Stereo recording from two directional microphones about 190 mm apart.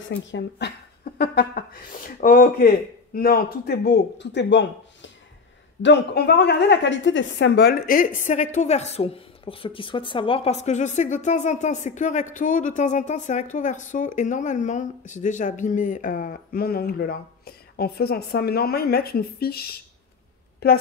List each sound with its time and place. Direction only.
0.1 s a woman's voice: 60° left (ahead or behind)